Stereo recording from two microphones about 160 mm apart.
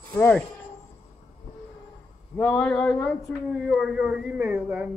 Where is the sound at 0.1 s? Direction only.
10° left (ahead or behind).